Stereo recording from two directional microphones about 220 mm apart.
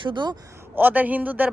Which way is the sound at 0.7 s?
10° right (ahead or behind).